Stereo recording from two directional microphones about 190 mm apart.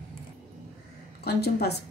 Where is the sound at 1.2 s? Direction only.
55° left (ahead or behind).